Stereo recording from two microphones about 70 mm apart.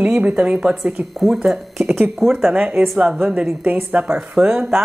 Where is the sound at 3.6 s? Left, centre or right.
Right.